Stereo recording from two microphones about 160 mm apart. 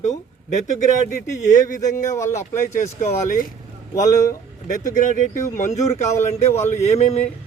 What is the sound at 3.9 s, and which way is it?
Speech, 20° left (ahead or behind).